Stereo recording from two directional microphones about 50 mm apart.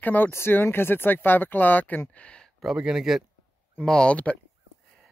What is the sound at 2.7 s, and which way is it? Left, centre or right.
Speech, centre.